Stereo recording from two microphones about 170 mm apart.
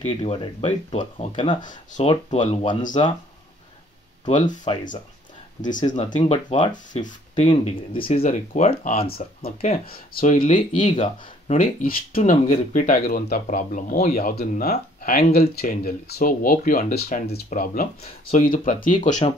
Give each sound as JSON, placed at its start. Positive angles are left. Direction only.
{"t": 0.0, "sound": "speech", "side_deg": 35}
{"t": 1.6, "sound": "speech", "side_deg": 50}
{"t": 2.0, "sound": "speech", "side_deg": 35}
{"t": 4.3, "sound": "speech", "side_deg": 45}
{"t": 5.9, "sound": "speech", "side_deg": 50}
{"t": 6.2, "sound": "speech", "side_deg": 35}
{"t": 6.7, "sound": "speech", "side_deg": 50}
{"t": 9.1, "sound": "speech", "side_deg": 55}
{"t": 10.8, "sound": "speech", "side_deg": 40}